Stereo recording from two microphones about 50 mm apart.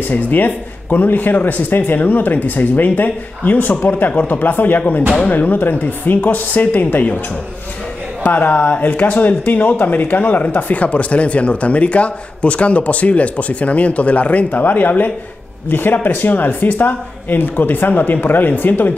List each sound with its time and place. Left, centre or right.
0.0 s speech: left
8.2 s speech: left